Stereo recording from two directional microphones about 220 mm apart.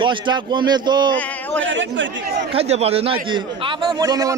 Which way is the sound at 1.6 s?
55° right (ahead or behind).